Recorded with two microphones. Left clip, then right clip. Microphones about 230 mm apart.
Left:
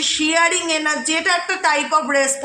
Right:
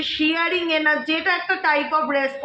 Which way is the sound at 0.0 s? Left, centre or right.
Left.